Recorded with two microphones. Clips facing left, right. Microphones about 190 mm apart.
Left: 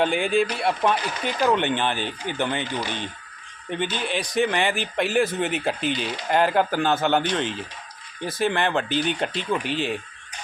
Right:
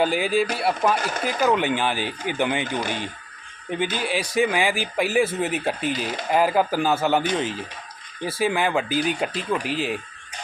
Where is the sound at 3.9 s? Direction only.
5° right (ahead or behind).